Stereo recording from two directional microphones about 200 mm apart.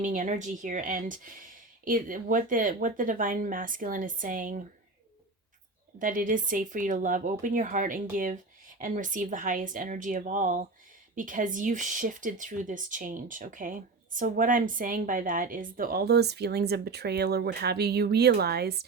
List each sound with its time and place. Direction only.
0.0 s speech: 40° right (ahead or behind)
6.0 s speech: 45° right (ahead or behind)